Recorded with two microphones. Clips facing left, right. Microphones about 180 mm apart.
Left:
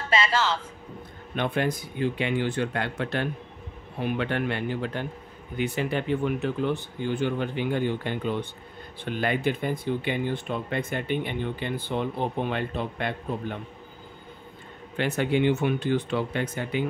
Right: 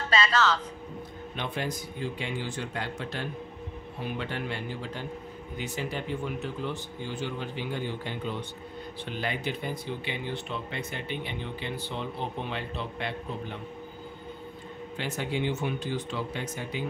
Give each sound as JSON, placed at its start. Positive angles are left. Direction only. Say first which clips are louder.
{"t": 0.1, "sound": "a man's voice", "louder": "left 1 dB", "side_deg": 25}
{"t": 1.3, "sound": "speech", "louder": "left 7 dB", "side_deg": 55}
{"t": 15.0, "sound": "speech", "louder": "left 7 dB", "side_deg": 60}